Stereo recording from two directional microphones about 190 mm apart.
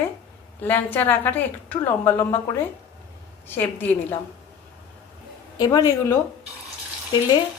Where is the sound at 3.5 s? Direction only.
10° left (ahead or behind).